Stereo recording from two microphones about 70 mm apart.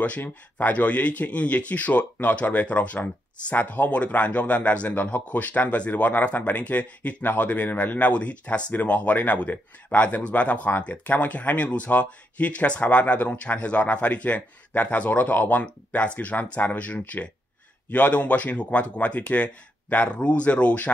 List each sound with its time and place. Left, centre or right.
0.0 s speech: left